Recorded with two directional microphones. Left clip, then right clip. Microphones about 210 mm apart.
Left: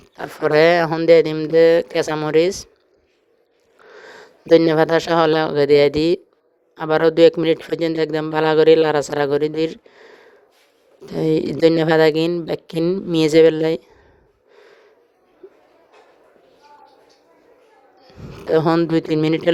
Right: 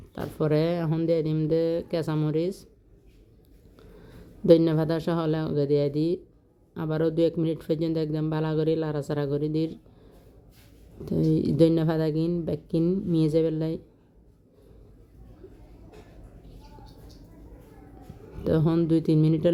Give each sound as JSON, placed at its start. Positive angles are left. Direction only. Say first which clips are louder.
{"t": 0.4, "sound": "speech", "louder": "left 12 dB", "side_deg": 25}
{"t": 4.5, "sound": "speech", "louder": "left 10 dB", "side_deg": 25}
{"t": 11.1, "sound": "speech", "louder": "left 7 dB", "side_deg": 30}
{"t": 12.8, "sound": "speech", "louder": "left 8 dB", "side_deg": 20}
{"t": 13.1, "sound": "speech", "louder": "left 13 dB", "side_deg": 30}
{"t": 18.3, "sound": "speech", "louder": "left 9 dB", "side_deg": 25}